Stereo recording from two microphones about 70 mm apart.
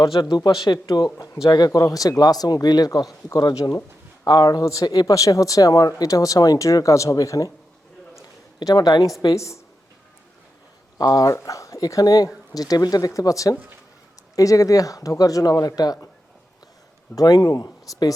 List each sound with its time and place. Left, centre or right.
0.0 s speech: left
4.3 s speech: left
4.6 s speech: left
8.5 s speech: left
9.3 s speech: left
10.9 s speech: left
11.3 s speech: left
17.2 s speech: left